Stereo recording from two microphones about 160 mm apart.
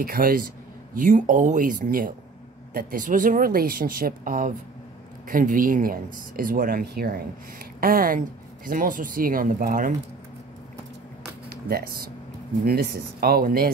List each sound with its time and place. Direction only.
0.0 s speech: 65° right (ahead or behind)
0.9 s speech: 55° right (ahead or behind)
11.4 s speech: 70° right (ahead or behind)